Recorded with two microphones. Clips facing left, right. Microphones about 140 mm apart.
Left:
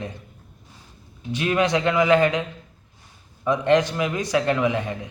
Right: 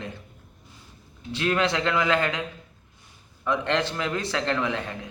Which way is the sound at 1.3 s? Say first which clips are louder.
Left 3 dB; 15° left (ahead or behind).